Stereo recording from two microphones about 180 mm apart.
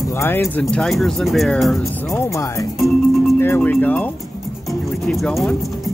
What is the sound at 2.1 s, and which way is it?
Speech, 15° left (ahead or behind).